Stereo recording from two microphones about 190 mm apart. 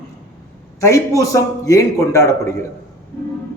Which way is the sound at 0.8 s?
15° left (ahead or behind).